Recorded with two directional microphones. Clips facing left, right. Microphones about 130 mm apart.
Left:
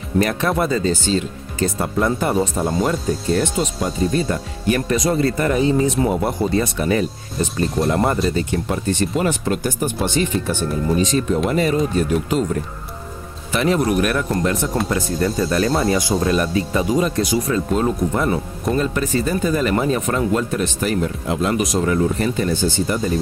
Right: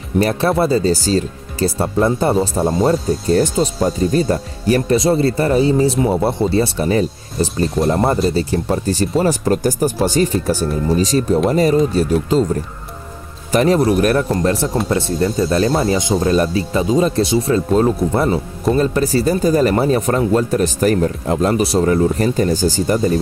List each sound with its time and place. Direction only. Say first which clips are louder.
0.2 s speech: right 4 dB; 30° right (ahead or behind)
13.5 s speech: right 4 dB; 40° right (ahead or behind)